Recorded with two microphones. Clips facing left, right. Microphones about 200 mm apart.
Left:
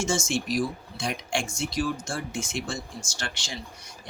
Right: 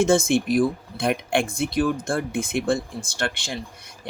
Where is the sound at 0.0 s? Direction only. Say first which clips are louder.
Right 9 dB; 55° right (ahead or behind).